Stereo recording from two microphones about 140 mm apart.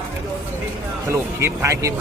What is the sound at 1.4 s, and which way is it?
Speech, 20° right (ahead or behind).